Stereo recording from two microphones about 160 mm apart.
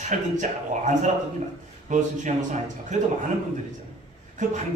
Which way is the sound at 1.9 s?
50° right (ahead or behind).